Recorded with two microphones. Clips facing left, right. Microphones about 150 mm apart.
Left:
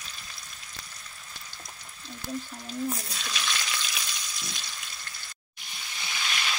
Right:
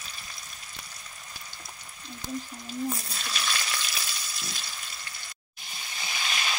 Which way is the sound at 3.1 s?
5° right (ahead or behind).